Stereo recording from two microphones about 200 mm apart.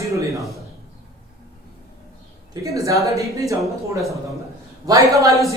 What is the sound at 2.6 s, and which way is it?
Speech, 15° right (ahead or behind).